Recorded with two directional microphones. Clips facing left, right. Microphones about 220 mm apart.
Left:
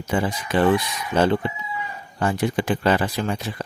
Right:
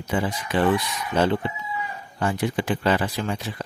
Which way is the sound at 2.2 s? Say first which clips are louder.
Left 2 dB; 45° left (ahead or behind).